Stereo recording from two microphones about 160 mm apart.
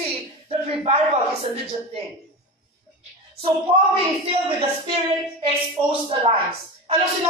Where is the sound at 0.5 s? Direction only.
40° right (ahead or behind).